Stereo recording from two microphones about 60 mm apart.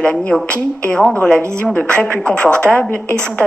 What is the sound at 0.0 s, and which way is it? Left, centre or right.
A woman's voice, centre.